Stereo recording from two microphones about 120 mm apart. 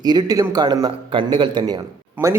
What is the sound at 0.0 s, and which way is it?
Speech, 35° right (ahead or behind).